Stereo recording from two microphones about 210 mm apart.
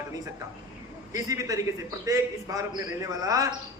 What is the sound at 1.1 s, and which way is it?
A man's voice, 15° right (ahead or behind).